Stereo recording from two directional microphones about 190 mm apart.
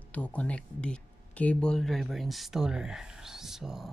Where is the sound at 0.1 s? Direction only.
5° left (ahead or behind).